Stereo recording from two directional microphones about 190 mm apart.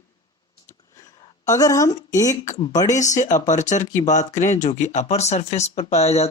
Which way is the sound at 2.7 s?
20° left (ahead or behind).